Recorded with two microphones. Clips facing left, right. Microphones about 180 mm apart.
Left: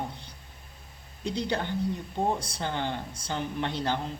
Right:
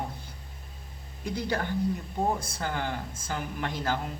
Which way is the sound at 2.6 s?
25° left (ahead or behind).